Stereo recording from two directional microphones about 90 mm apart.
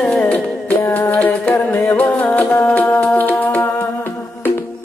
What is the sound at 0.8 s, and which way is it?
Music, 25° left (ahead or behind).